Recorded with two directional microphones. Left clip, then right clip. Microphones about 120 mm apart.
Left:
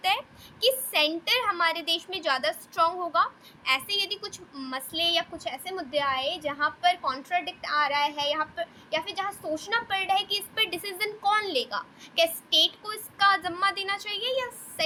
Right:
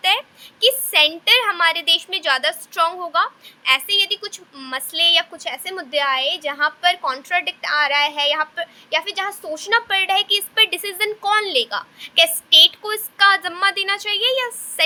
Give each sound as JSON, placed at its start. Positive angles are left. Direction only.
{"t": 0.0, "sound": "a woman's voice", "side_deg": -5}